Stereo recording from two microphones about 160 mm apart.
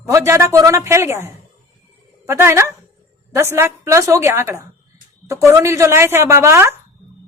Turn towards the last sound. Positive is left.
turn(degrees=-15)  # may be behind; listen again after turning